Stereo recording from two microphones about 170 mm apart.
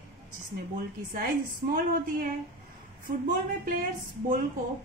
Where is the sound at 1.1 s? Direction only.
60° right (ahead or behind).